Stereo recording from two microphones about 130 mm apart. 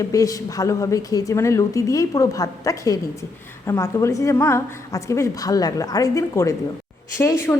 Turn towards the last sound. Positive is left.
turn(degrees=20)  # may be behind; listen again after turning